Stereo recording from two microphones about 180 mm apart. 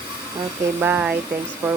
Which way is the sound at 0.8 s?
10° right (ahead or behind).